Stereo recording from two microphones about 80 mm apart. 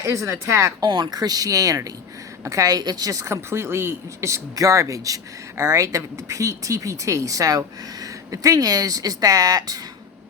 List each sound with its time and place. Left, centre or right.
0.0 s speech: right
0.9 s a woman's voice: right